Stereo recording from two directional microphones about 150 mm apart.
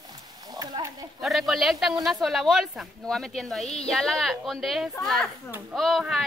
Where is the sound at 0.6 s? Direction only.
25° right (ahead or behind).